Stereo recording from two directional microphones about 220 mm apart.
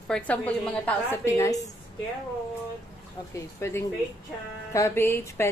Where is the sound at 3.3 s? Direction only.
10° left (ahead or behind).